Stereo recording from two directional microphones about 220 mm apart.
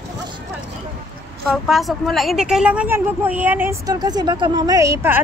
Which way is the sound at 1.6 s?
Centre (ahead or behind).